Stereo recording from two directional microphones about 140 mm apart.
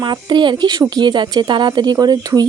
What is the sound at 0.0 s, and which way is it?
Speech, 30° right (ahead or behind).